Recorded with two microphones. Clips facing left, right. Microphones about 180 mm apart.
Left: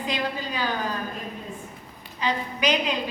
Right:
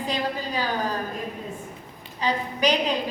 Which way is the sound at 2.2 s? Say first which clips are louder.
Right 2 dB; 40° right (ahead or behind).